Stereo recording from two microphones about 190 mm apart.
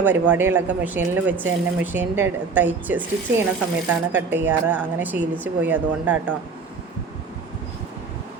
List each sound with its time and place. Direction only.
0.0 s a woman's voice: 10° right (ahead or behind)